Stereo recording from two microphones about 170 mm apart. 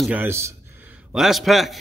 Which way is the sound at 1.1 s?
Centre (ahead or behind).